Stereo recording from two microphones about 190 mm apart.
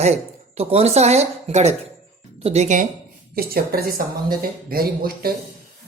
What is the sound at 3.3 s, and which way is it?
Speech, 50° right (ahead or behind).